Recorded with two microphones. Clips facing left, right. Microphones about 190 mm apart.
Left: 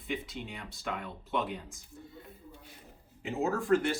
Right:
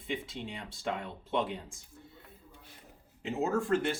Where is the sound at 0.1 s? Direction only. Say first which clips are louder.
Even; 25° right (ahead or behind).